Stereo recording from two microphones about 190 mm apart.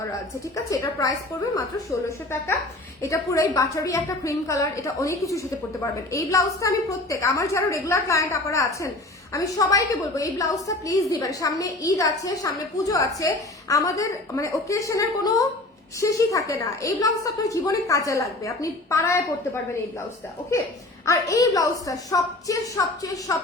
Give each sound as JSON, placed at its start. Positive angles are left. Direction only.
{"t": 0.1, "sound": "a woman's voice", "side_deg": 20}
{"t": 21.0, "sound": "a woman's voice", "side_deg": 15}